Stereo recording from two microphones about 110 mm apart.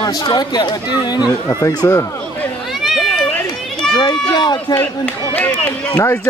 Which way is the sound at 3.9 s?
40° left (ahead or behind).